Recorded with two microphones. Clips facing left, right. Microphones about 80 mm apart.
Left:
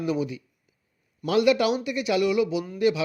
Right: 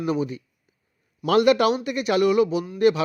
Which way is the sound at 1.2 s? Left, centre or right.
Right.